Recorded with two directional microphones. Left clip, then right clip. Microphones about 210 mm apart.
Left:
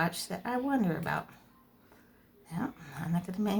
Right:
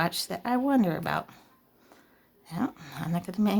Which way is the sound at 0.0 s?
40° right (ahead or behind).